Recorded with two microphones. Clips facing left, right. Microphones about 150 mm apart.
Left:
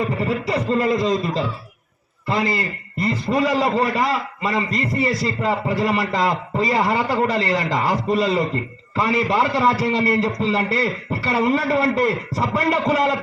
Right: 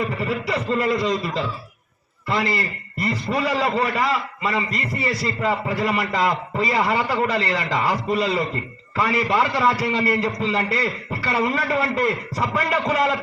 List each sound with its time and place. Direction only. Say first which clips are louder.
0.2 s a man's voice: left 2 dB; 30° left (ahead or behind)